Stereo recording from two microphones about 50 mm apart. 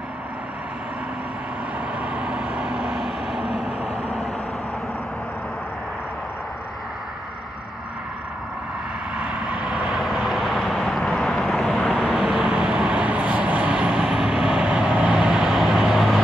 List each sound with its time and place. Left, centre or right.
2.0 s vehicle: right; by 3.7 s centre
9.1 s vehicle: right; by 12.0 s centre
12.0 s vehicle: centre